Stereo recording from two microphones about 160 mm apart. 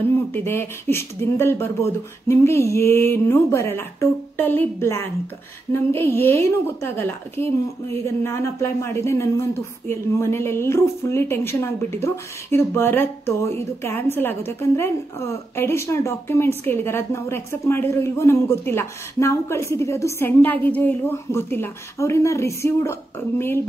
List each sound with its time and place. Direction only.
0.1 s a woman's voice: 15° left (ahead or behind)